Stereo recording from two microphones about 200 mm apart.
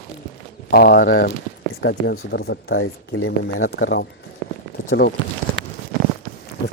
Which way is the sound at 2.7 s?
90° left.